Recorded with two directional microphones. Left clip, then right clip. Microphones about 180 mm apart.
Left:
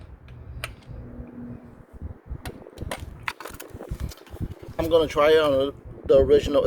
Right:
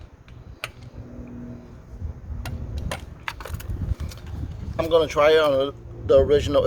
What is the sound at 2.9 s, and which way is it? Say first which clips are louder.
Wood: even; 35° left (ahead or behind).